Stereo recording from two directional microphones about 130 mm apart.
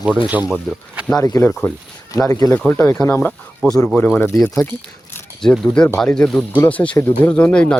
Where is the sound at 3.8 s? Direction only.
10° left (ahead or behind).